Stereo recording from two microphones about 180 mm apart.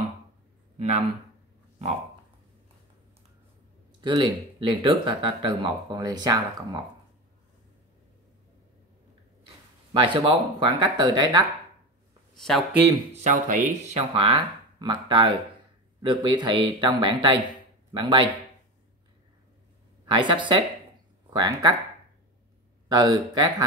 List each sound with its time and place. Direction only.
0.7 s speech: 35° right (ahead or behind)
4.0 s speech: 25° right (ahead or behind)
9.9 s speech: 30° right (ahead or behind)
12.4 s speech: centre (ahead or behind)
13.1 s speech: 45° right (ahead or behind)
14.1 s speech: 30° right (ahead or behind)
20.1 s speech: 25° right (ahead or behind)
22.8 s speech: 20° right (ahead or behind)